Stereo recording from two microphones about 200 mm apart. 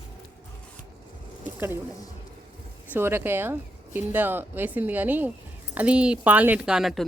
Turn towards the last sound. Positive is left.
turn(degrees=0)  # may be behind; listen again after turning